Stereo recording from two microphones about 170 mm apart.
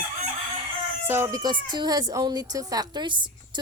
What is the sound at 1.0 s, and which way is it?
Speech, 15° right (ahead or behind).